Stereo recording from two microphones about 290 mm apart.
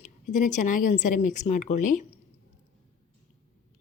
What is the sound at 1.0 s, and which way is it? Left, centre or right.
Speech, left.